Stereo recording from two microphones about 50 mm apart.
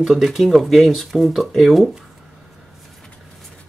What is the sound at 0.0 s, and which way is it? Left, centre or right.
Speech, centre.